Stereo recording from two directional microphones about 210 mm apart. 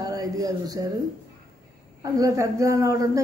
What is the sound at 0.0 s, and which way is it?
Speech, 15° right (ahead or behind).